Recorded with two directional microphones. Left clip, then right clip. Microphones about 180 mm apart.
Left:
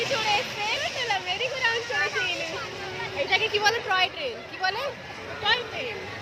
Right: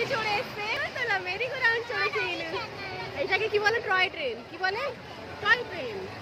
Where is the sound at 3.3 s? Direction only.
55° right (ahead or behind).